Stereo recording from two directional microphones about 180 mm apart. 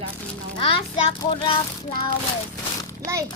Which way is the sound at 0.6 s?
30° left (ahead or behind).